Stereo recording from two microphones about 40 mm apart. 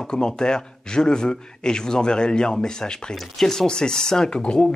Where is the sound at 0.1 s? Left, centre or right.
Centre.